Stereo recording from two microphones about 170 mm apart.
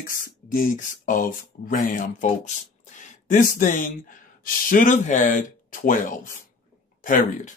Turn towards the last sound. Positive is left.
turn(degrees=50)  # may be behind; listen again after turning